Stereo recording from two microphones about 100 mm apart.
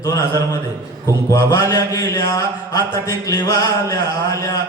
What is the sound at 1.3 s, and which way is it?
A man's voice, 30° left (ahead or behind).